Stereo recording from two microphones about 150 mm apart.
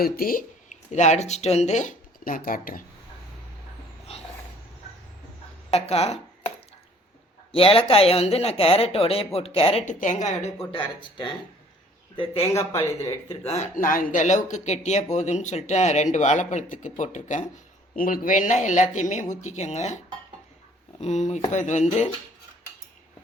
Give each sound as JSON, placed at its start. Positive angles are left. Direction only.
{"t": 0.0, "sound": "speech", "side_deg": 75}
{"t": 4.1, "sound": "a sound", "side_deg": 40}
{"t": 5.7, "sound": "speech", "side_deg": 45}
{"t": 7.5, "sound": "speech", "side_deg": 40}
{"t": 10.0, "sound": "speech", "side_deg": 50}
{"t": 10.7, "sound": "speech", "side_deg": 35}
{"t": 12.7, "sound": "speech", "side_deg": 20}
{"t": 13.5, "sound": "speech", "side_deg": 55}
{"t": 17.9, "sound": "speech", "side_deg": 70}
{"t": 21.0, "sound": "speech", "side_deg": 50}